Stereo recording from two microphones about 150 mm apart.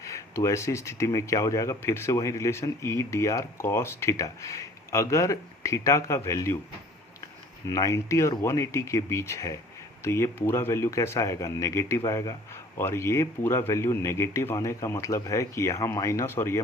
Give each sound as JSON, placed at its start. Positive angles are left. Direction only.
{"t": 0.0, "sound": "speech", "side_deg": 20}
{"t": 7.7, "sound": "speech", "side_deg": 20}